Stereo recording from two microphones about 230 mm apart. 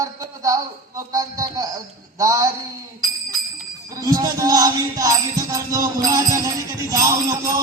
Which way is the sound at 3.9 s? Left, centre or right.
Centre.